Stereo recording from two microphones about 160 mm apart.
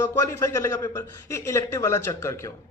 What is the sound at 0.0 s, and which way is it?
A man's voice, 20° left (ahead or behind).